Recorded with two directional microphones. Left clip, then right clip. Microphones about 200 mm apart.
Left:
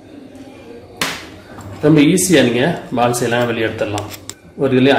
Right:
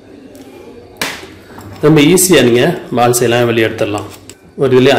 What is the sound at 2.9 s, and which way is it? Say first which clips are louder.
Speech: right 6 dB; 35° right (ahead or behind).